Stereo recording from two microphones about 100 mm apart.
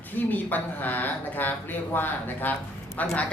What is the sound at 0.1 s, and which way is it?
Speech, 20° left (ahead or behind).